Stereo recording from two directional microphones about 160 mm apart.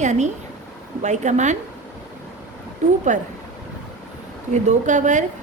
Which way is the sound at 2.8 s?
50° right (ahead or behind).